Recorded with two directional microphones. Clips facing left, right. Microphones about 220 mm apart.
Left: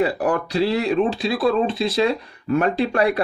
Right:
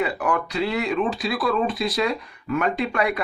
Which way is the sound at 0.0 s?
35° left (ahead or behind).